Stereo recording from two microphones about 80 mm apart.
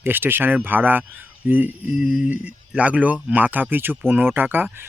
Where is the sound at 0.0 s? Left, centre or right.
Right.